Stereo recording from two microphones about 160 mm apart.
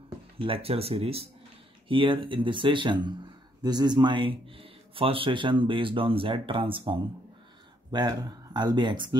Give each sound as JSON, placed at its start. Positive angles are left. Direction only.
{"t": 0.4, "sound": "speech", "side_deg": -35}